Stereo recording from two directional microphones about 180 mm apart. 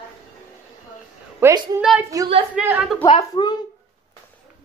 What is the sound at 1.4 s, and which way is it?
A woman's voice, 15° right (ahead or behind).